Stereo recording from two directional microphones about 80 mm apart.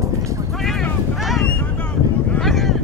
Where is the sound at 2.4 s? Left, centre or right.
Centre.